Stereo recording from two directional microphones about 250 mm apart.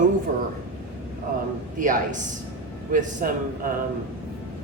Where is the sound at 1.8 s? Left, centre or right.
Right.